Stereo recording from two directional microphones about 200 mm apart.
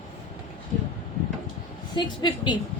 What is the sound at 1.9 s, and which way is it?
Speech, 20° left (ahead or behind).